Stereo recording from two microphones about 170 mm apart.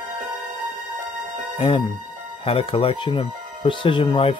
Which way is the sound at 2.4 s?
35° left (ahead or behind).